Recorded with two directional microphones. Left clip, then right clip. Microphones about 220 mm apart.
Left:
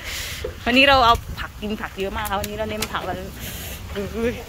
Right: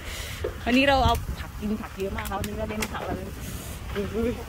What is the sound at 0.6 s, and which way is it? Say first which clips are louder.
Speech: left 7 dB; 5° right (ahead or behind).